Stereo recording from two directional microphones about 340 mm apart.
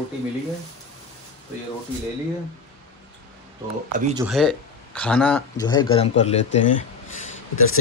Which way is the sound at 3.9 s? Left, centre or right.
Right.